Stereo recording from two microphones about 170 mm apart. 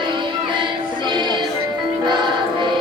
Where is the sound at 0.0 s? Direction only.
30° right (ahead or behind).